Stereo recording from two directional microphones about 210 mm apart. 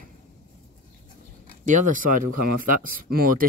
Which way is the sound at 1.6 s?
35° right (ahead or behind).